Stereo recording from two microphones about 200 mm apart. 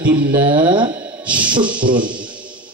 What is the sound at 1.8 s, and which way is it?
Speech, 25° right (ahead or behind).